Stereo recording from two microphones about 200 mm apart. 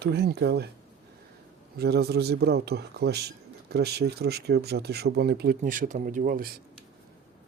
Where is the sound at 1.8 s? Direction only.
55° right (ahead or behind).